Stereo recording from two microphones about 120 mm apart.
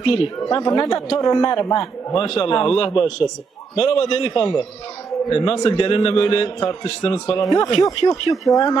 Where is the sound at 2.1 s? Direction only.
45° left (ahead or behind).